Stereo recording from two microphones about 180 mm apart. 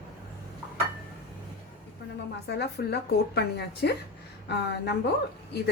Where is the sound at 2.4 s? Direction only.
65° left (ahead or behind).